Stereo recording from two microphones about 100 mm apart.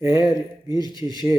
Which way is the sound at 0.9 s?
40° right (ahead or behind).